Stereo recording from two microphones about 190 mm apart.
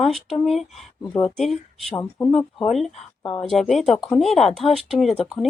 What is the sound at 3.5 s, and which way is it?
Speech, centre (ahead or behind).